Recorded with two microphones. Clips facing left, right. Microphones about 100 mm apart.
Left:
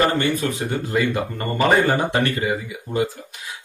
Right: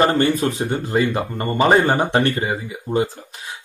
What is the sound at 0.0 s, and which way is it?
A man's voice, 30° right (ahead or behind).